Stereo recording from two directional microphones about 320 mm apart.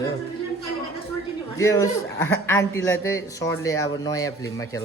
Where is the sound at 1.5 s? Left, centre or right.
Centre.